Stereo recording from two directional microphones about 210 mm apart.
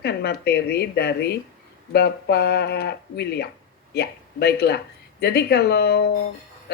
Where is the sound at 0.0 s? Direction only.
50° left (ahead or behind).